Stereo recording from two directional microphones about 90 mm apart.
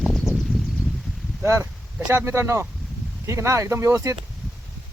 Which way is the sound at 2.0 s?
30° right (ahead or behind).